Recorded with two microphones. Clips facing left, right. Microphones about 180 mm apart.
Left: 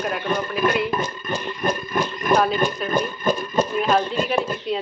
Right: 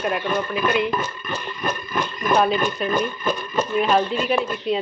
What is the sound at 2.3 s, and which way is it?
Speech, centre (ahead or behind).